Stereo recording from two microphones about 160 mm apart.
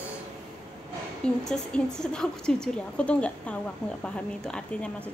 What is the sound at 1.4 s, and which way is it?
A woman's voice, 5° left (ahead or behind).